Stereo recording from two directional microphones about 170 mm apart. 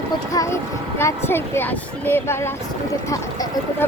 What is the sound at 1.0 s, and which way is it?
Speech, 15° left (ahead or behind).